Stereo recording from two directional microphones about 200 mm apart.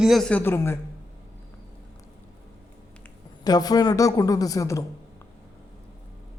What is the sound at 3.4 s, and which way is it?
A man's voice, 20° left (ahead or behind).